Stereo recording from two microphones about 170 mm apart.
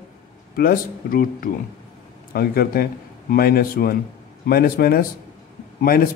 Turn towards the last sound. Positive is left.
turn(degrees=60)  # may be behind; listen again after turning